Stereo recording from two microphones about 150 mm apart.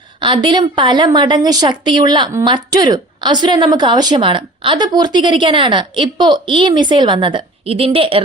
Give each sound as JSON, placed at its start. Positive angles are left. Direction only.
{"t": 0.2, "sound": "a woman's voice", "side_deg": -30}